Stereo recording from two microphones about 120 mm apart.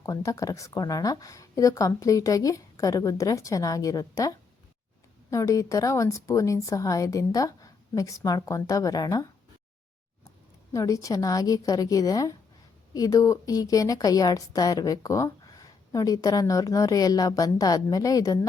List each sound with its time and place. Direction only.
0.0 s a woman's voice: 30° left (ahead or behind)
10.7 s a woman's voice: 30° left (ahead or behind)